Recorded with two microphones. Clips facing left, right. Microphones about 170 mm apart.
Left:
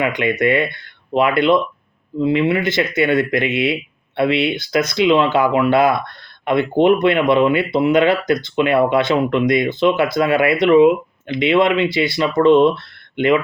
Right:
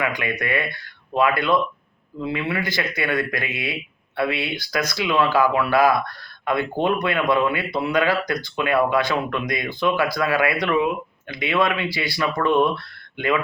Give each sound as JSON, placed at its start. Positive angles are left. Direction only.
{"t": 0.0, "sound": "speech", "side_deg": 20}